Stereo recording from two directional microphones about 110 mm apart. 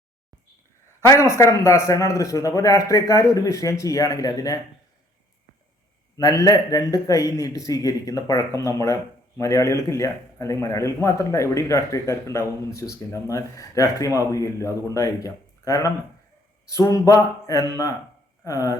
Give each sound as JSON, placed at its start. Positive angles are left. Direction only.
{"t": 1.0, "sound": "a man's voice", "side_deg": 25}
{"t": 6.1, "sound": "a man's voice", "side_deg": 35}